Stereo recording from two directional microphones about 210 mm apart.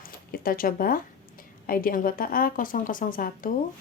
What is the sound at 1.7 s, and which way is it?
Speech, 40° left (ahead or behind).